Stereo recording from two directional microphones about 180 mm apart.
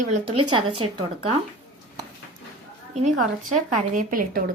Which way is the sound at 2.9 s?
40° right (ahead or behind).